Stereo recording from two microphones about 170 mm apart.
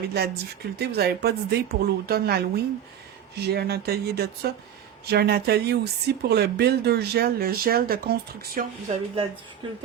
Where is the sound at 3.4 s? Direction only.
70° right (ahead or behind).